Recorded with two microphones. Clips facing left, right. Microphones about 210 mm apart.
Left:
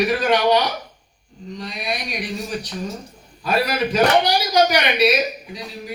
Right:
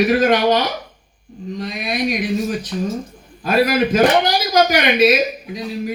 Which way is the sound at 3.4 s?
45° right (ahead or behind).